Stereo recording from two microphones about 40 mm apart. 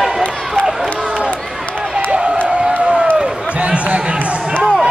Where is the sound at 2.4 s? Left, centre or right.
Right.